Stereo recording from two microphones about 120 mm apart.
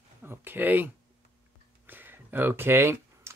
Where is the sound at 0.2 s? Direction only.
20° right (ahead or behind).